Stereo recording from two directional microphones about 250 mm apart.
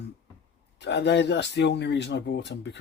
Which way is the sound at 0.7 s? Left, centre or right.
Left.